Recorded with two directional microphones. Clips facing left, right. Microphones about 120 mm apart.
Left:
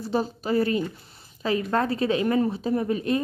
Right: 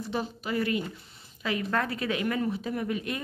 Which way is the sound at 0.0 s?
35° left (ahead or behind).